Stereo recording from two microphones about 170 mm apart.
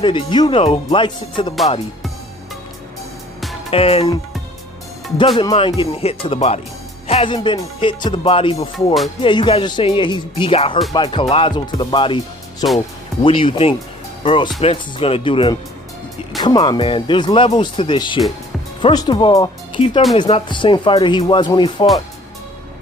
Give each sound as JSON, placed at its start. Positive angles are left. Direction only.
{"t": 0.0, "sound": "speech", "side_deg": 30}
{"t": 3.7, "sound": "music", "side_deg": 35}
{"t": 5.4, "sound": "music", "side_deg": 30}
{"t": 7.3, "sound": "music", "side_deg": 25}
{"t": 8.7, "sound": "music", "side_deg": 0}
{"t": 9.2, "sound": "speech", "side_deg": 30}
{"t": 13.2, "sound": "music", "side_deg": 30}
{"t": 14.2, "sound": "speech", "side_deg": 30}
{"t": 14.6, "sound": "music", "side_deg": 35}
{"t": 16.3, "sound": "speech", "side_deg": 25}